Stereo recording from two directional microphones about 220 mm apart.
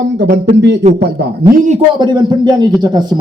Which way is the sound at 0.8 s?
30° right (ahead or behind).